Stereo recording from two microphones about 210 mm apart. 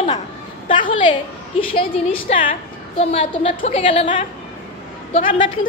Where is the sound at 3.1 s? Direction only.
30° left (ahead or behind).